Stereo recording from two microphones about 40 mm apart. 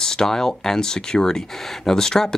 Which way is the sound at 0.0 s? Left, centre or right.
Centre.